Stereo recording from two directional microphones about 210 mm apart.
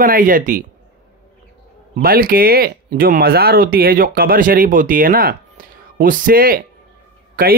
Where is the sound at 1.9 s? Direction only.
45° right (ahead or behind).